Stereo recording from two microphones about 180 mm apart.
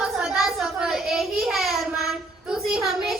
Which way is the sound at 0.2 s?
5° right (ahead or behind).